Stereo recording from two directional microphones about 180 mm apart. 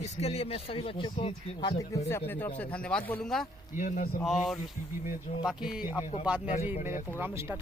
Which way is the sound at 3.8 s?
45° left (ahead or behind).